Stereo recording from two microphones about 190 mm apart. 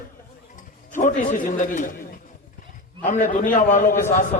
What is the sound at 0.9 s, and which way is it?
Speech, 40° left (ahead or behind).